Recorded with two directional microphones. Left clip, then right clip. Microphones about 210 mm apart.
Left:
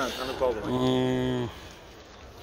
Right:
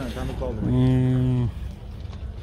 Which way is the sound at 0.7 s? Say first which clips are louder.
Right 1 dB; 25° left (ahead or behind).